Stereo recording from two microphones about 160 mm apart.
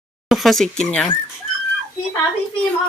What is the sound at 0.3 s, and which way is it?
Speech, centre (ahead or behind).